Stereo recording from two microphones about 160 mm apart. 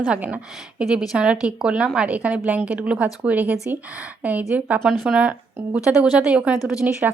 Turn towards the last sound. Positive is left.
turn(degrees=-5)  # may be behind; listen again after turning